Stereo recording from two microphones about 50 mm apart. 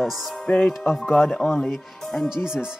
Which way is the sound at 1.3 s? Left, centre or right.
Left.